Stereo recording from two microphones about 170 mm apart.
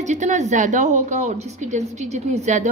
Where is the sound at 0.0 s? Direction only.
45° right (ahead or behind).